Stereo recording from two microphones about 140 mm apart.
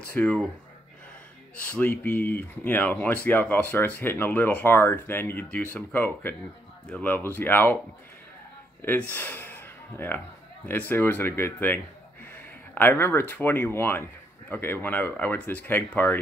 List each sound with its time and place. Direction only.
0.1 s speech: 10° left (ahead or behind)
1.6 s speech: 15° left (ahead or behind)
9.1 s speech: 15° left (ahead or behind)